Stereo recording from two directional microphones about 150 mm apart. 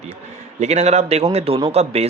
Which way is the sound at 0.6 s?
50° right (ahead or behind).